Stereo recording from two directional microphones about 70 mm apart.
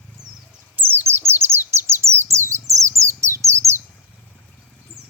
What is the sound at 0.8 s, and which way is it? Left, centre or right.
Bird, right.